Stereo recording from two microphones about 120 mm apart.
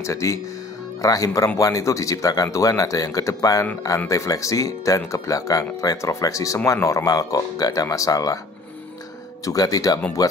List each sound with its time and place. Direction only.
0.0 s speech: 25° left (ahead or behind)
9.4 s speech: 30° left (ahead or behind)